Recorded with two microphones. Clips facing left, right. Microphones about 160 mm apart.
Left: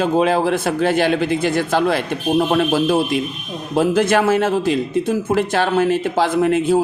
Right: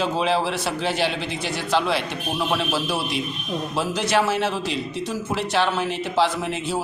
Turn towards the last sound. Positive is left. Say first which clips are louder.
# left 11 dB
turn(degrees=50)  # may be behind; listen again after turning